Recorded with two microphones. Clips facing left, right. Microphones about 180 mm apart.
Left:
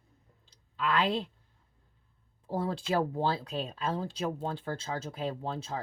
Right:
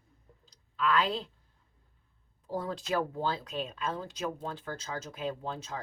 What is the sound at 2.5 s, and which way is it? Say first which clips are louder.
Speech: left 2 dB; 30° left (ahead or behind).